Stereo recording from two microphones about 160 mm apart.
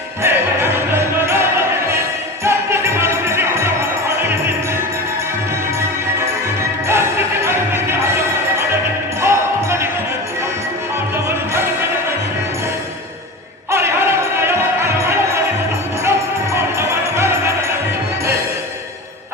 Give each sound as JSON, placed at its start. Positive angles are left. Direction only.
{"t": 0.2, "sound": "music", "side_deg": -15}
{"t": 6.8, "sound": "music", "side_deg": -15}
{"t": 9.2, "sound": "basketball bounce", "side_deg": -15}
{"t": 11.3, "sound": "music", "side_deg": -15}
{"t": 13.7, "sound": "music", "side_deg": -15}